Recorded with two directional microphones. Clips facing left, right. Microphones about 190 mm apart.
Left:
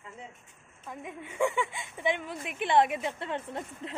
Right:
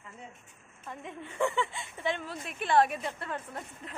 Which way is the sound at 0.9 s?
10° left (ahead or behind).